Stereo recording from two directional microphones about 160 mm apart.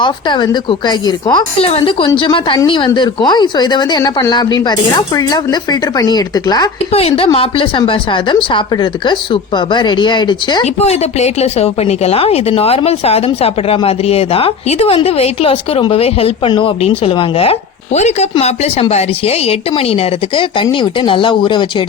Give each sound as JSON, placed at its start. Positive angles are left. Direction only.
{"t": 0.0, "sound": "a woman's voice", "side_deg": 30}
{"t": 6.9, "sound": "a woman's voice", "side_deg": 40}
{"t": 10.8, "sound": "a woman's voice", "side_deg": 40}